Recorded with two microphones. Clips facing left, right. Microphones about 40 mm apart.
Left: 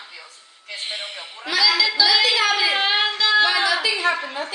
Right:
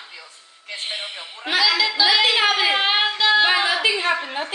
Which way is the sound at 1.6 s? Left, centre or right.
Centre.